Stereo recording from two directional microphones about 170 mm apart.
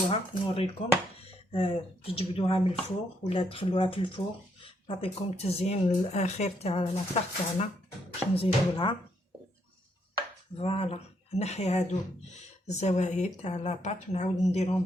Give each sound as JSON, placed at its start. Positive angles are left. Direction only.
{"t": 0.1, "sound": "speech", "side_deg": 35}
{"t": 8.4, "sound": "speech", "side_deg": 30}
{"t": 10.6, "sound": "speech", "side_deg": 35}